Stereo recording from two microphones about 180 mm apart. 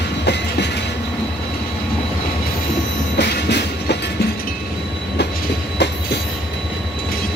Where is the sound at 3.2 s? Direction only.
70° left (ahead or behind).